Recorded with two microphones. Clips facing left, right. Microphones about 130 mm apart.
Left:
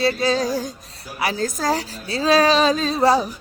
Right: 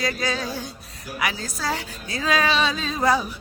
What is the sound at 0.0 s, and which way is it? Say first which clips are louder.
A woman's voice: left 7 dB; 30° left (ahead or behind).